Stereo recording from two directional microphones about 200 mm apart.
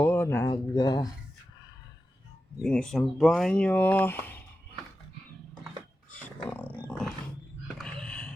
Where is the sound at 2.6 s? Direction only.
5° left (ahead or behind).